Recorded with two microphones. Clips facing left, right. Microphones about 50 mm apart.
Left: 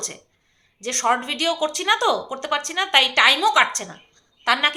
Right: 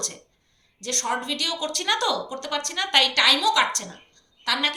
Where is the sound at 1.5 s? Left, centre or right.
Centre; by 4.6 s left.